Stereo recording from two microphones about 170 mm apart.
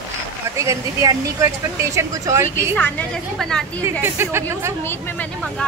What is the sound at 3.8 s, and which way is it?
Speech, 15° right (ahead or behind).